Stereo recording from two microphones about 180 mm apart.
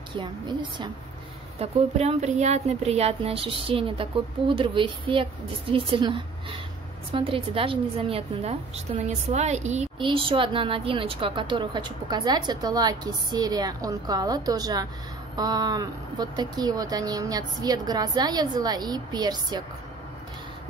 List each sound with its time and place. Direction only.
0.1 s a woman's voice: 25° right (ahead or behind)
1.6 s a woman's voice: 35° right (ahead or behind)
9.9 s a woman's voice: 30° right (ahead or behind)